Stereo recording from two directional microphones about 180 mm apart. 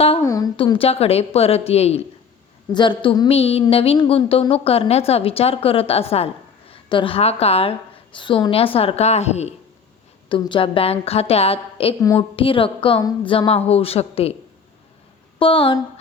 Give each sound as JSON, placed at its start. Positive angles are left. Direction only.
{"t": 0.2, "sound": "a woman's voice", "side_deg": 20}
{"t": 2.7, "sound": "a woman's voice", "side_deg": 25}
{"t": 15.4, "sound": "a woman's voice", "side_deg": 30}